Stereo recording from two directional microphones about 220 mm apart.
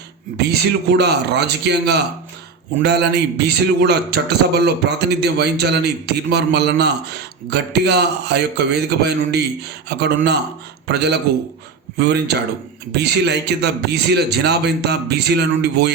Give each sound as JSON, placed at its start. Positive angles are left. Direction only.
{"t": 0.3, "sound": "a man's voice", "side_deg": -50}